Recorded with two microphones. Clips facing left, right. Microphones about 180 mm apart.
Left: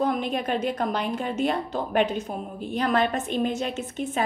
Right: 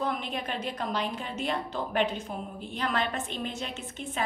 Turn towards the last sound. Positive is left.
turn(degrees=45)  # may be behind; listen again after turning